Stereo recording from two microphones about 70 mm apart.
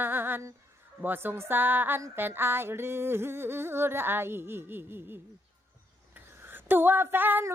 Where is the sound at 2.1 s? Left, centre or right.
Right.